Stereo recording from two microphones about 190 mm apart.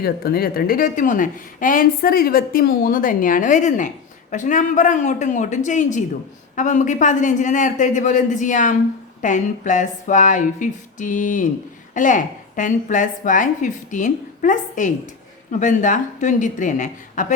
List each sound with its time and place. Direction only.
0.0 s speech: 55° left (ahead or behind)